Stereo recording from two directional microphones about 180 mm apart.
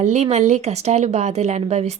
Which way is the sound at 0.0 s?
40° right (ahead or behind).